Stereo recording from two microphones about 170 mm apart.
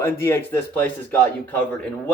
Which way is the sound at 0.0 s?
15° left (ahead or behind).